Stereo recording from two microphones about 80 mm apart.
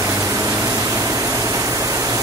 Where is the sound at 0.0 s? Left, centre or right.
Right.